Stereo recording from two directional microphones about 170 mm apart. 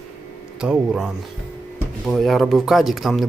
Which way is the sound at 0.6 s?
5° right (ahead or behind).